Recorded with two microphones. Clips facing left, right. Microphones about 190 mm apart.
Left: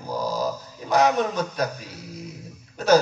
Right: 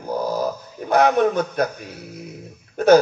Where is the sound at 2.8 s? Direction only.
55° right (ahead or behind).